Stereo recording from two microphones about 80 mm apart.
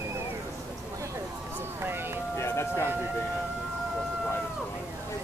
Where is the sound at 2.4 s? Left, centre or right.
Left.